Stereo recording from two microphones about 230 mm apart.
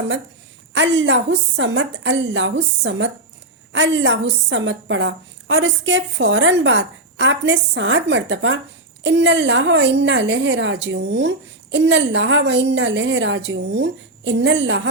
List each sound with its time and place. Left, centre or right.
0.7 s a woman's voice: right